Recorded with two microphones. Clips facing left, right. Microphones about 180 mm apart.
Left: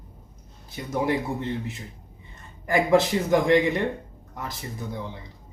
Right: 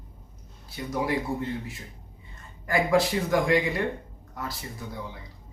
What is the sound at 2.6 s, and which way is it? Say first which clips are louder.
Speech: left 3 dB; 20° left (ahead or behind).